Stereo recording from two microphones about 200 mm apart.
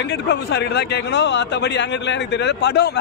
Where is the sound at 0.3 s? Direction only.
60° left (ahead or behind).